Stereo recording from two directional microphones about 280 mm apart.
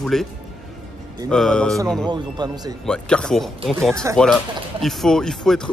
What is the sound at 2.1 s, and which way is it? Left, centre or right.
Speech, centre.